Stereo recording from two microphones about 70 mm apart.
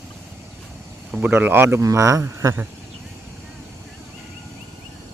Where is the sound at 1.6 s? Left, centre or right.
Right.